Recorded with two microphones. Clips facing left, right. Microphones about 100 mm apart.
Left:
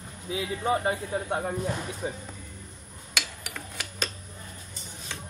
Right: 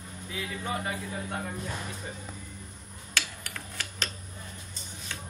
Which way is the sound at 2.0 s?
90° left.